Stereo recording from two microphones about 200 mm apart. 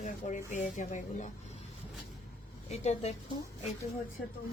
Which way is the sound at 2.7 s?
35° left (ahead or behind).